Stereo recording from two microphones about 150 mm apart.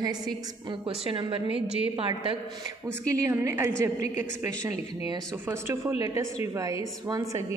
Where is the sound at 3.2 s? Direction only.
15° right (ahead or behind).